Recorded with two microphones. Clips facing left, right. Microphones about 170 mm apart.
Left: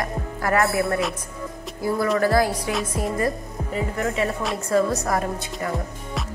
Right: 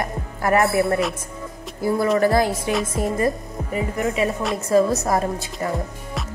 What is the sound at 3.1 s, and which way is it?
Speech, 20° right (ahead or behind).